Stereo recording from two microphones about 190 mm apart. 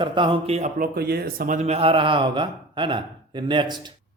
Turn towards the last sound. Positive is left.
turn(degrees=-25)  # may be behind; listen again after turning